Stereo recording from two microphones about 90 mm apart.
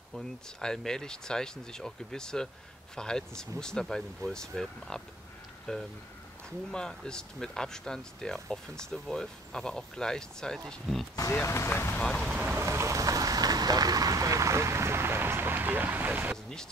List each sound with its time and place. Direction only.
0.1 s speech: 5° left (ahead or behind)
11.4 s speech: 30° left (ahead or behind)
12.0 s speech: 5° left (ahead or behind)
12.3 s speech: 15° right (ahead or behind)
12.5 s speech: 30° right (ahead or behind)